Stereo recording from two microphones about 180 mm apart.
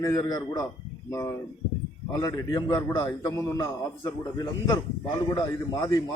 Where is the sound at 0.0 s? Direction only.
20° left (ahead or behind).